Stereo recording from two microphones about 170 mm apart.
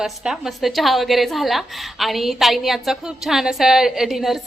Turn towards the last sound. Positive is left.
turn(degrees=0)  # may be behind; listen again after turning